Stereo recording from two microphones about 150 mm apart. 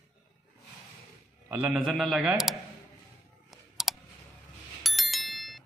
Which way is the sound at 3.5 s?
Centre (ahead or behind).